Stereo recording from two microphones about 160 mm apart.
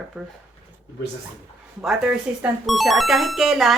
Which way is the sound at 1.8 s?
5° right (ahead or behind).